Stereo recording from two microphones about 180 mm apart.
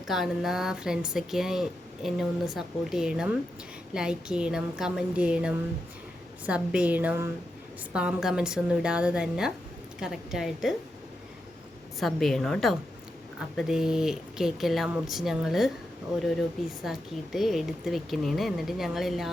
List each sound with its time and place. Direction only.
0.1 s a woman's voice: centre (ahead or behind)
11.9 s speech: centre (ahead or behind)
16.8 s speech: centre (ahead or behind)